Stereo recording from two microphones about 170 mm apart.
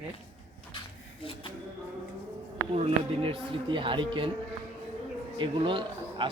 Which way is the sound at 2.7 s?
35° right (ahead or behind).